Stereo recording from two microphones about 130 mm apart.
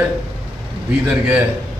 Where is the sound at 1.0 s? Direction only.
10° right (ahead or behind).